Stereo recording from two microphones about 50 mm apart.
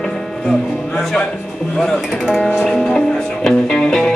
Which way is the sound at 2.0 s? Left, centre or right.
Centre.